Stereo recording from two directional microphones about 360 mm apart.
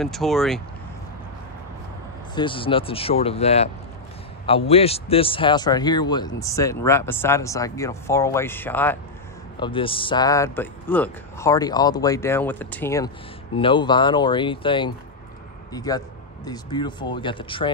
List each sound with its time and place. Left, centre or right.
0.0 s speech: centre
2.3 s speech: centre